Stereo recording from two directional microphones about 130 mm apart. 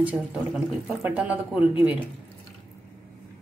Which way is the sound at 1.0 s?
15° right (ahead or behind).